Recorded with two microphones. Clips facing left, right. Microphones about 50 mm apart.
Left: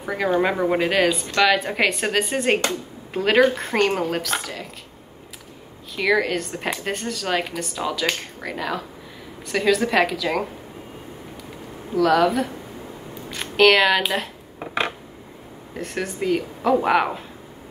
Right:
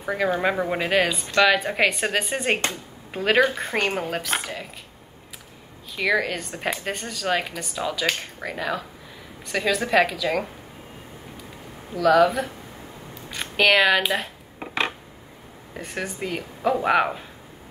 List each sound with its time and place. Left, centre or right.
0.0 s a woman's voice: centre
4.2 s speech: right
5.9 s a woman's voice: centre
11.9 s speech: centre
15.8 s a woman's voice: centre